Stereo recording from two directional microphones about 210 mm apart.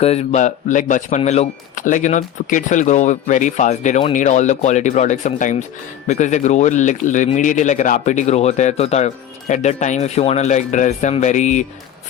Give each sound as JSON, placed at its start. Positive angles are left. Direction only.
{"t": 0.0, "sound": "speech", "side_deg": 30}